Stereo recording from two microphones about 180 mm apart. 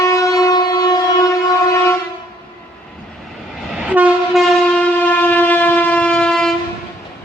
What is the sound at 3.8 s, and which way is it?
Train, 5° right (ahead or behind).